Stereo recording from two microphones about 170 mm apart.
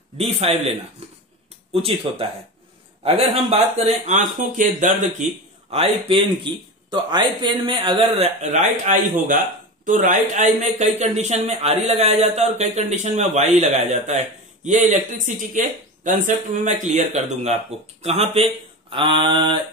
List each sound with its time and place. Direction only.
0.2 s speech: 35° right (ahead or behind)
5.7 s a man's voice: 35° right (ahead or behind)
8.4 s speech: 45° right (ahead or behind); by 19.5 s 30° right (ahead or behind)